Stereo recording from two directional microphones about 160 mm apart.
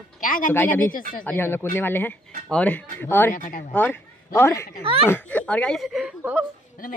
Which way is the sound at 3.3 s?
60° left (ahead or behind).